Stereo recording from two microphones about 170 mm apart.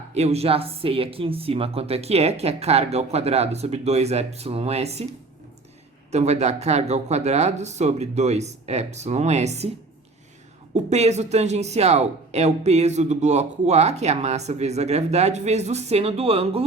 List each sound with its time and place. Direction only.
0.1 s speech: 40° right (ahead or behind)
6.1 s speech: 40° right (ahead or behind)
10.8 s speech: 40° right (ahead or behind)